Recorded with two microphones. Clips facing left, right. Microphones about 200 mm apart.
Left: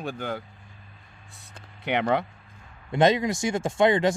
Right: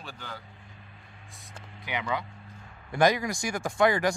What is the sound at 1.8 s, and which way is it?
Speech, 65° left (ahead or behind).